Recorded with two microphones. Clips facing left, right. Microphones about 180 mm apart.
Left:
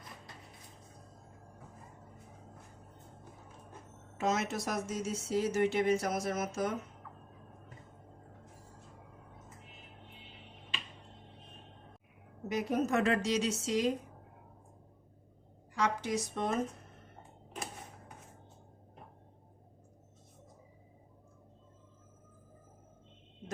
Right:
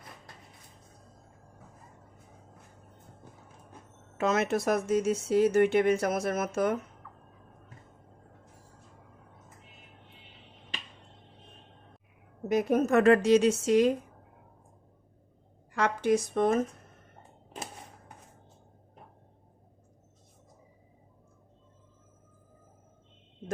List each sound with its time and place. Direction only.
4.2 s speech: 60° right (ahead or behind)
12.5 s a woman's voice: 50° right (ahead or behind)
15.7 s speech: 60° right (ahead or behind)